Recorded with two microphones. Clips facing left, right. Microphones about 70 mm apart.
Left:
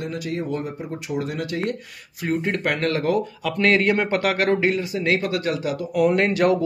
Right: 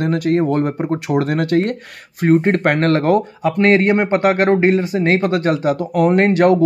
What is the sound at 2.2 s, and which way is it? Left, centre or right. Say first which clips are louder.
Speech: right 9 dB; right.